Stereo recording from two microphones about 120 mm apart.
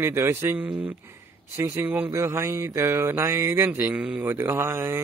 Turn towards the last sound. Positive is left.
turn(degrees=-20)  # may be behind; listen again after turning